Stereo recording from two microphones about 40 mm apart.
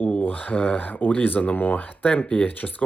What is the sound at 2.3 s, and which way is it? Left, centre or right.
Speech, left.